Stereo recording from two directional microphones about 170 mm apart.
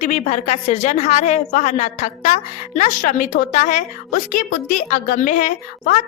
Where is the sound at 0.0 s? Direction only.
45° left (ahead or behind).